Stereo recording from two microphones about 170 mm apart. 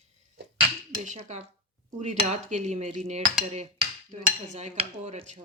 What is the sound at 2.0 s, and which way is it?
Speech, 45° right (ahead or behind).